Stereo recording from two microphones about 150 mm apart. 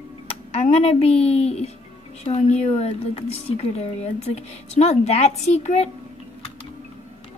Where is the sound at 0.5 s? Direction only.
45° left (ahead or behind).